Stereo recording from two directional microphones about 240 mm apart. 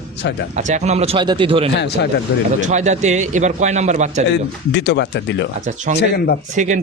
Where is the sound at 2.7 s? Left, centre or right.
Right.